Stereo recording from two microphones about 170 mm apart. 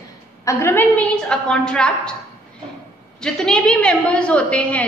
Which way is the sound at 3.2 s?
5° left (ahead or behind).